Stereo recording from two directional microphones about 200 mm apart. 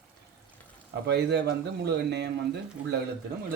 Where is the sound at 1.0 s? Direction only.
55° right (ahead or behind).